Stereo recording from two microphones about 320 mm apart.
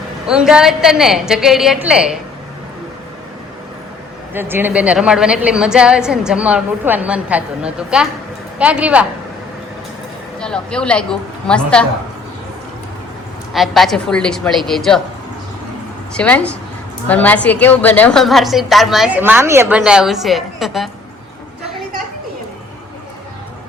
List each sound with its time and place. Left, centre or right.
0.3 s a woman's voice: centre
4.4 s a woman's voice: centre
10.4 s a woman's voice: centre
13.5 s a woman's voice: centre
16.1 s a woman's voice: centre